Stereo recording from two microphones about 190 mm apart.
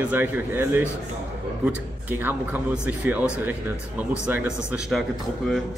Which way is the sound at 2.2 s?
10° right (ahead or behind).